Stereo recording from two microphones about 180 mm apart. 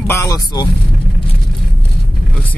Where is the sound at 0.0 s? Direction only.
15° left (ahead or behind).